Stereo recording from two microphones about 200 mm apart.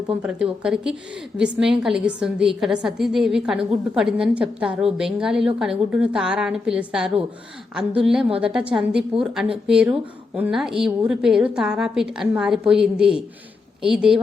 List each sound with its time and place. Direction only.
0.1 s a woman's voice: 5° right (ahead or behind)